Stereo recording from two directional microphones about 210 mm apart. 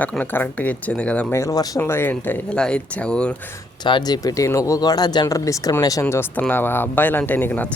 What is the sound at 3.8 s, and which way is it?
Speech, 20° left (ahead or behind).